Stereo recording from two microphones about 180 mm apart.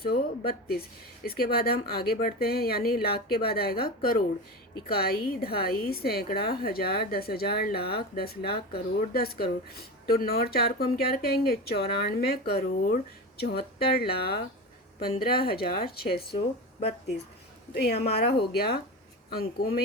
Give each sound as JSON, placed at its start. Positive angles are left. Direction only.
{"t": 0.0, "sound": "a woman's voice", "side_deg": 60}
{"t": 17.7, "sound": "a woman's voice", "side_deg": 60}